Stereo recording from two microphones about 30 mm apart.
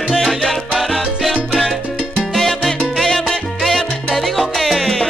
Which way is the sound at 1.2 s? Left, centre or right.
Centre.